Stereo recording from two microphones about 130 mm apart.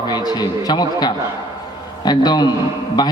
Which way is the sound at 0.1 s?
30° left (ahead or behind).